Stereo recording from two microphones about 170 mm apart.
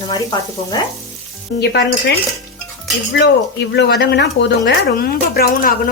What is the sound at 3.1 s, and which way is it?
Speech, 90° left.